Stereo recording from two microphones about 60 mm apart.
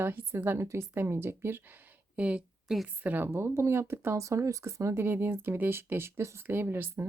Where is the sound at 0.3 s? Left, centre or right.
Right.